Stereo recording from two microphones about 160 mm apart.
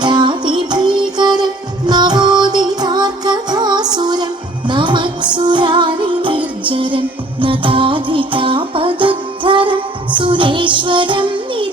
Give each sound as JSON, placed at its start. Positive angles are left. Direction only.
{"t": 0.0, "sound": "music", "side_deg": -30}